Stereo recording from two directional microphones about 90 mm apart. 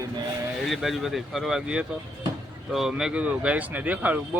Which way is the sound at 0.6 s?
Centre (ahead or behind).